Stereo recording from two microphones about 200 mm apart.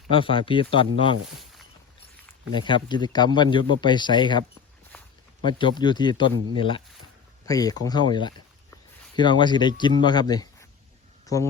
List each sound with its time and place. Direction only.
0.1 s speech: 25° left (ahead or behind)
2.5 s speech: 25° left (ahead or behind)